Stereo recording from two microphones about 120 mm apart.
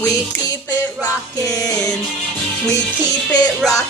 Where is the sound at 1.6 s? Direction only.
30° left (ahead or behind).